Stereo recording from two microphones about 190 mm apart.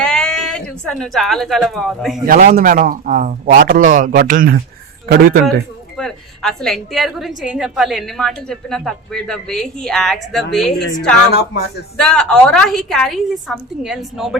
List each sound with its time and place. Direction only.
0.0 s a sound: 5° left (ahead or behind)
2.2 s a man's voice: 50° right (ahead or behind)
6.0 s a woman's voice: 5° left (ahead or behind)
11.3 s speech: 55° left (ahead or behind)
11.9 s a woman's voice: 5° left (ahead or behind)